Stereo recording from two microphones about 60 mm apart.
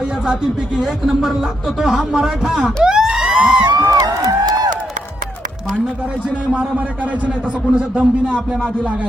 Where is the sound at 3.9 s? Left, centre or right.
Right.